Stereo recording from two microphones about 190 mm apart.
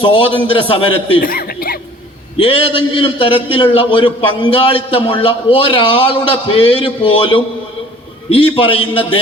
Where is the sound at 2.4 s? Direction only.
30° left (ahead or behind).